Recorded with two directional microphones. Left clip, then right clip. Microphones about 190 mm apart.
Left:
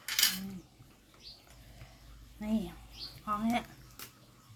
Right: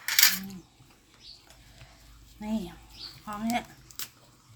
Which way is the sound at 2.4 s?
Centre (ahead or behind).